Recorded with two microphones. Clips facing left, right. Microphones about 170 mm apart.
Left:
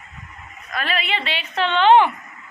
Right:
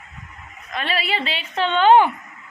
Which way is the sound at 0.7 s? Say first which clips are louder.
Right 1 dB; 30° right (ahead or behind).